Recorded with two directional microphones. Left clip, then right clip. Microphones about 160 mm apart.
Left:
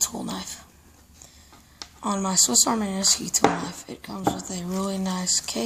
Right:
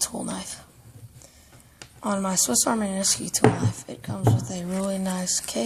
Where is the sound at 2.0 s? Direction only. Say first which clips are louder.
Even; 25° right (ahead or behind).